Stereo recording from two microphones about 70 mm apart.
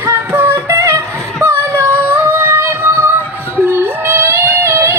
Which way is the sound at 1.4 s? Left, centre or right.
Right.